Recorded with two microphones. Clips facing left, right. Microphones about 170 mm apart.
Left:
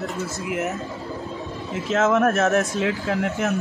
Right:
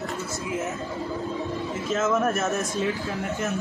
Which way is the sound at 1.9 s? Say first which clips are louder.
Left 5 dB; 70° left (ahead or behind).